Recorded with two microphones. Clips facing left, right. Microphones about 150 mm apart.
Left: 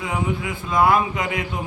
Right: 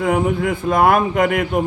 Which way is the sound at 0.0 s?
55° right (ahead or behind).